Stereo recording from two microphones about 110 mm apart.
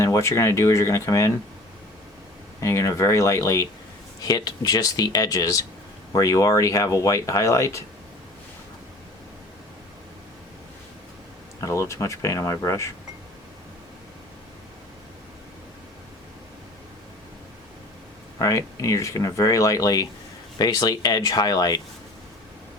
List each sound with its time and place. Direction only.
0.0 s speech: 25° left (ahead or behind)
2.6 s speech: 25° left (ahead or behind)
4.3 s speech: 40° left (ahead or behind)
11.6 s speech: 25° left (ahead or behind)
18.3 s speech: 30° left (ahead or behind)